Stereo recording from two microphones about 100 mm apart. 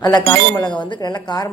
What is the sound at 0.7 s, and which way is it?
Speech, 50° left (ahead or behind).